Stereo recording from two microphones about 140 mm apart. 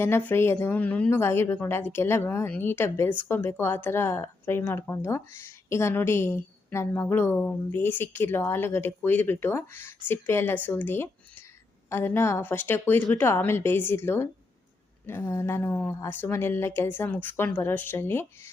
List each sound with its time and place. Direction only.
0.0 s speech: 15° left (ahead or behind)